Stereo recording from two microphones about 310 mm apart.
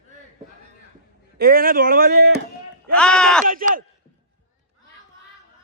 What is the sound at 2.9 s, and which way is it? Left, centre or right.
Speech, centre.